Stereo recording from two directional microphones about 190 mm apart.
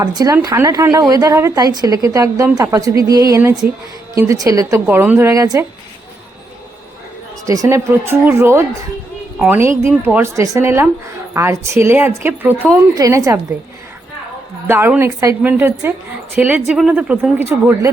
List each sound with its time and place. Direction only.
0.0 s a woman's voice: 20° right (ahead or behind)
7.4 s a woman's voice: 15° right (ahead or behind)
14.7 s a woman's voice: 10° right (ahead or behind)